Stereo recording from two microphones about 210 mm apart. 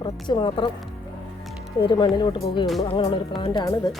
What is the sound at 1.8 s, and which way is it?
Speech, 20° left (ahead or behind).